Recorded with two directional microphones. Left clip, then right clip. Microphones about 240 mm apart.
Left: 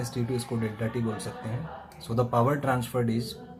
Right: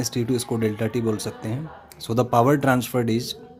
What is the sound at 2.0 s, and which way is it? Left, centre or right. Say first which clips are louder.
Speech: right 7 dB; right.